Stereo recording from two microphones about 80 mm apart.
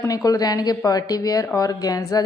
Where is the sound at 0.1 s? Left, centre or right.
Left.